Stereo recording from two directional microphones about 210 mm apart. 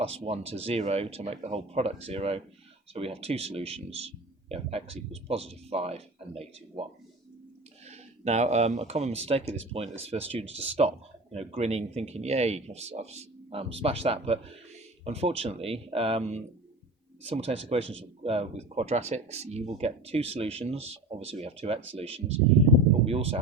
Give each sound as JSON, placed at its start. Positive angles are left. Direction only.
{"t": 0.0, "sound": "speech", "side_deg": -30}
{"t": 7.9, "sound": "speech", "side_deg": -30}